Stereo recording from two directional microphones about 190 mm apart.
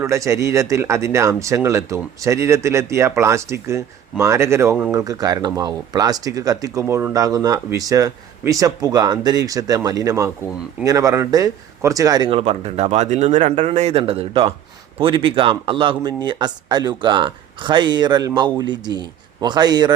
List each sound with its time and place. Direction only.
0.0 s speech: 15° right (ahead or behind)